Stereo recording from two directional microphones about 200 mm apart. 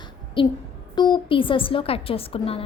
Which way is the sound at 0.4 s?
25° left (ahead or behind).